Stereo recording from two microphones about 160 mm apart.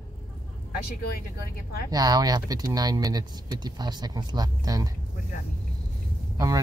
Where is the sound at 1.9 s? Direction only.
25° right (ahead or behind).